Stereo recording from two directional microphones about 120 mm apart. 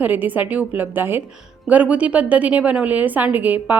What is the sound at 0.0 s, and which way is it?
A woman's voice, 15° right (ahead or behind).